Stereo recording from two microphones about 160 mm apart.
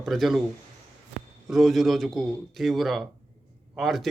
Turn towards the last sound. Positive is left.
turn(degrees=0)  # may be behind; listen again after turning